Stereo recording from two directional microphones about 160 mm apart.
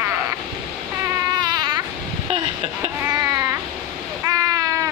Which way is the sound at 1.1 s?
25° right (ahead or behind).